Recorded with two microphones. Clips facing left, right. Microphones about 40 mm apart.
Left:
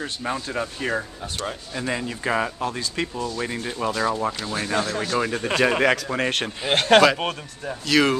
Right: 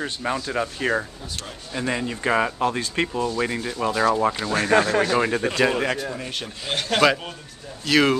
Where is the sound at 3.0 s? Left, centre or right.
Right.